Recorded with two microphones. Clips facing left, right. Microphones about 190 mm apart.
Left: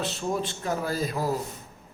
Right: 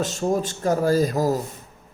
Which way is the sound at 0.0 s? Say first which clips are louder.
Right 6 dB; 45° right (ahead or behind).